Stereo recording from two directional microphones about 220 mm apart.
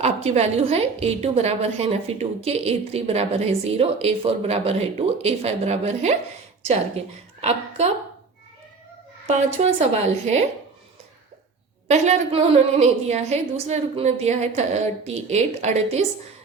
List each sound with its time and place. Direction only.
0.0 s a woman's voice: 30° right (ahead or behind)
9.2 s a woman's voice: 30° right (ahead or behind)
11.9 s a woman's voice: 30° right (ahead or behind)